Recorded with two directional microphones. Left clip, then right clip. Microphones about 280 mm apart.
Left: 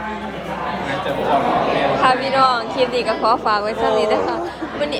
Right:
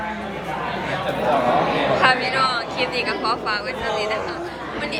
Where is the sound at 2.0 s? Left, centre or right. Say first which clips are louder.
Left 3 dB; centre.